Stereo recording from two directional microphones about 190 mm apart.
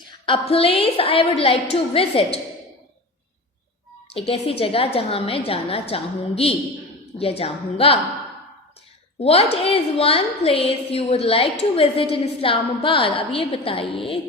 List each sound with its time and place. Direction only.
0.3 s a woman's voice: 30° left (ahead or behind)
4.1 s a woman's voice: 30° left (ahead or behind)
9.2 s a woman's voice: 30° left (ahead or behind)